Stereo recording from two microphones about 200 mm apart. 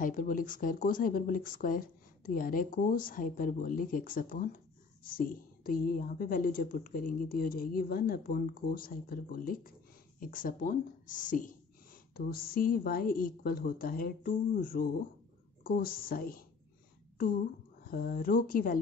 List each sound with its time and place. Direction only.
0.0 s a woman's voice: 45° left (ahead or behind)
17.8 s a woman's voice: 50° left (ahead or behind)